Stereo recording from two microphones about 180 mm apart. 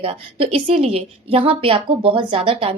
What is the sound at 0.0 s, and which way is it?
A woman's voice, 30° right (ahead or behind).